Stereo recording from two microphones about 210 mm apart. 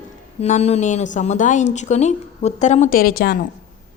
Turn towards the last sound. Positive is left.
turn(degrees=45)  # may be behind; listen again after turning